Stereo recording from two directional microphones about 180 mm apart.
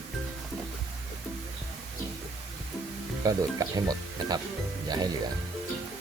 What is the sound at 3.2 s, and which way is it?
Speech, 20° right (ahead or behind).